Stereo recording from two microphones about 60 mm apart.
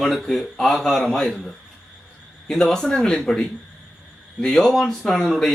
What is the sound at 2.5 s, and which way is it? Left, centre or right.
Speech, centre.